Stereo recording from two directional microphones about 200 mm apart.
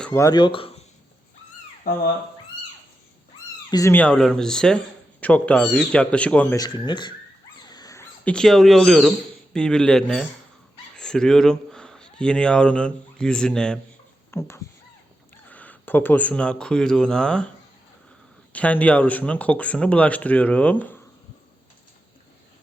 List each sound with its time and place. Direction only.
0.0 s speech: 15° left (ahead or behind)
3.7 s speech: 15° left (ahead or behind)
6.6 s speech: 20° left (ahead or behind)
7.7 s dog: 20° left (ahead or behind)
8.2 s speech: 5° left (ahead or behind)
14.3 s cat: 15° left (ahead or behind)
15.4 s speech: 10° left (ahead or behind)
18.5 s speech: 5° left (ahead or behind)